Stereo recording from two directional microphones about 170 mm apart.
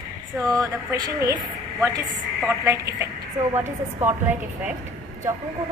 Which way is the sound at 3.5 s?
15° right (ahead or behind).